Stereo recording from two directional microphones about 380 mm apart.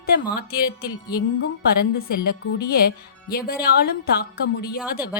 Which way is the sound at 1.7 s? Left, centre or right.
Left.